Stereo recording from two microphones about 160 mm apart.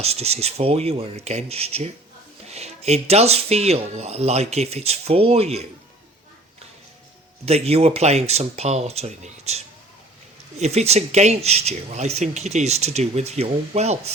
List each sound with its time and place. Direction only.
0.0 s speech: 40° right (ahead or behind)
7.4 s speech: 40° right (ahead or behind)